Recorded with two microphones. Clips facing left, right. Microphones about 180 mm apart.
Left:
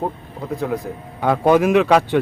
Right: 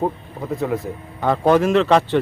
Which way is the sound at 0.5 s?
Centre (ahead or behind).